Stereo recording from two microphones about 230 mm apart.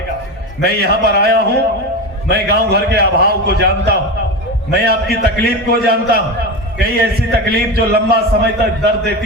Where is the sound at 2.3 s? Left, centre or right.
Right.